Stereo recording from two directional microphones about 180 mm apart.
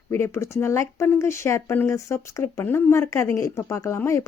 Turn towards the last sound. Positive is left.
turn(degrees=15)  # may be behind; listen again after turning